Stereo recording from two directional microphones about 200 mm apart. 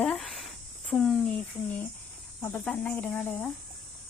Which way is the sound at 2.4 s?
5° left (ahead or behind).